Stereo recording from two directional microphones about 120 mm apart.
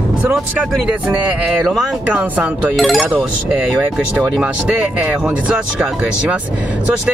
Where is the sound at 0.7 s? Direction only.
10° right (ahead or behind).